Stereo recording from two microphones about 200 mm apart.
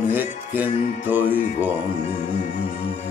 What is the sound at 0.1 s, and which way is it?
Music, 10° right (ahead or behind).